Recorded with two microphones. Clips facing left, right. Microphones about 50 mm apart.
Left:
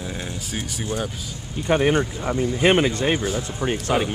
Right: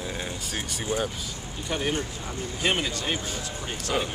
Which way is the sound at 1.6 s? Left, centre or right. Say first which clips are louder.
Left 10 dB; left.